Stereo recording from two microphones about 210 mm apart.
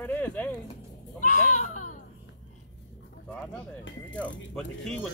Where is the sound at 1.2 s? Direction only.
35° left (ahead or behind).